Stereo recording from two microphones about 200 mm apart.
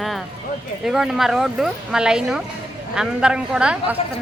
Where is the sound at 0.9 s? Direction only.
Centre (ahead or behind).